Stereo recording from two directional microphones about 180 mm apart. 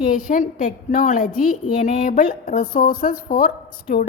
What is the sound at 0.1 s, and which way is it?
A woman's voice, 50° left (ahead or behind).